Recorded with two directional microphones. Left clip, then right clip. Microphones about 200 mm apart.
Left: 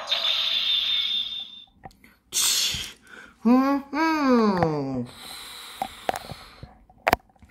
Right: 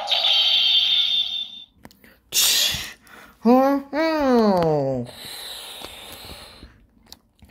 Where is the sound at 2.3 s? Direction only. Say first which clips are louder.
Right 4 dB; 30° right (ahead or behind).